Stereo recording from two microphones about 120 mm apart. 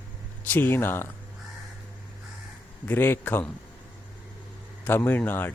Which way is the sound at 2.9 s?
15° left (ahead or behind).